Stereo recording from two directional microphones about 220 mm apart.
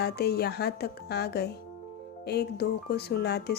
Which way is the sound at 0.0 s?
45° left (ahead or behind).